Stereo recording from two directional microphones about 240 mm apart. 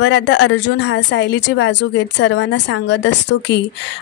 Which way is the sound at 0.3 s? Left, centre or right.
Left.